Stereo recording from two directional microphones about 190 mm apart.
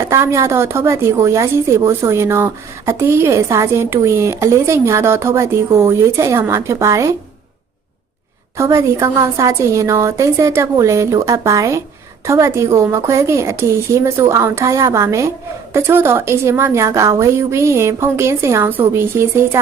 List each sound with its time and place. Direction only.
0.0 s a woman's voice: 15° right (ahead or behind)
8.5 s a woman's voice: 15° right (ahead or behind)